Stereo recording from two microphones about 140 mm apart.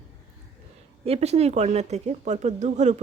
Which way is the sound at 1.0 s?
50° right (ahead or behind).